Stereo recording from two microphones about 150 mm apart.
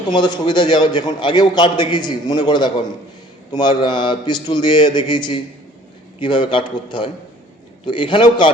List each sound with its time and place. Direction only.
0.1 s a man's voice: 30° left (ahead or behind)